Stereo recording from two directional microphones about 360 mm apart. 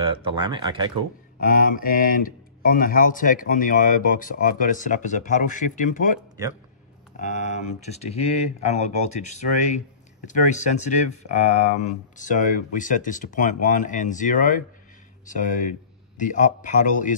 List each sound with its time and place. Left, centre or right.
0.0 s speech: centre
1.4 s speech: left
7.2 s speech: centre